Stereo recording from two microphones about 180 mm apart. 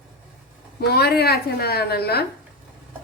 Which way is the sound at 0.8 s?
60° left (ahead or behind).